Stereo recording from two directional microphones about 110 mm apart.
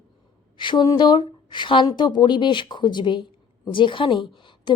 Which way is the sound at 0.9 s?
45° left (ahead or behind).